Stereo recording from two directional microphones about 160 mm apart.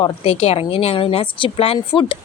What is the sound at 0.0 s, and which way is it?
A woman's voice, 40° left (ahead or behind).